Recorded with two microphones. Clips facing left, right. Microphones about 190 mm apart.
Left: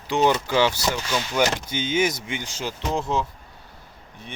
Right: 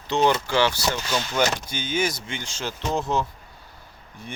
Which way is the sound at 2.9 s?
5° right (ahead or behind).